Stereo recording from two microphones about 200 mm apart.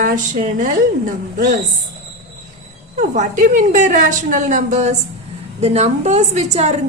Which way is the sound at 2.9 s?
40° right (ahead or behind).